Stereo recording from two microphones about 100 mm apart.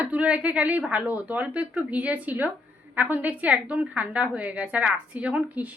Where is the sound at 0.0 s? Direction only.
15° right (ahead or behind).